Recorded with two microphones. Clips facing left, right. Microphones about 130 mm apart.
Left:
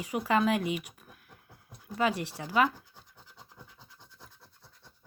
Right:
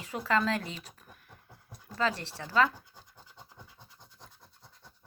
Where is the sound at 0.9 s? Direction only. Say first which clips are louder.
Even; 5° left (ahead or behind).